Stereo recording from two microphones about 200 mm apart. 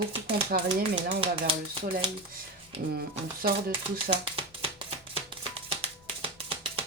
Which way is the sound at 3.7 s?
25° right (ahead or behind).